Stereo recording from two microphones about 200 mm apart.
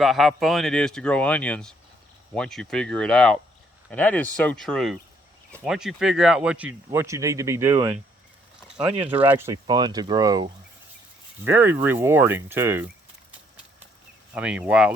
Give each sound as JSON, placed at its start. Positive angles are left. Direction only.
{"t": 0.0, "sound": "speech", "side_deg": 0}
{"t": 14.3, "sound": "speech", "side_deg": -5}